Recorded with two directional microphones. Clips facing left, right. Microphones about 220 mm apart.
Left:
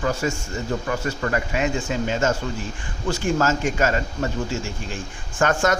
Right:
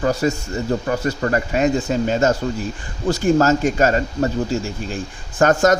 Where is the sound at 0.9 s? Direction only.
35° right (ahead or behind).